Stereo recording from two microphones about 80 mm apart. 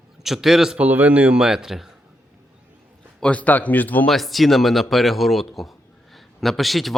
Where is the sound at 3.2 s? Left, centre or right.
Centre.